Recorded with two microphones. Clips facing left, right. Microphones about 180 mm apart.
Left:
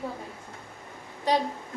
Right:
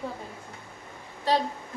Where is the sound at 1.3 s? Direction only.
15° left (ahead or behind).